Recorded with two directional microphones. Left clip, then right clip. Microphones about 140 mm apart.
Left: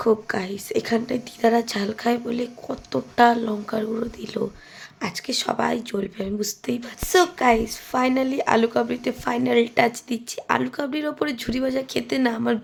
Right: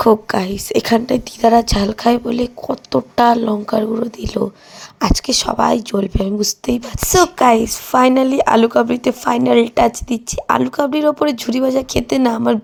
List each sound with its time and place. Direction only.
0.3 s speech: 55° right (ahead or behind); by 4.4 s 40° right (ahead or behind)
4.9 s speech: 55° right (ahead or behind)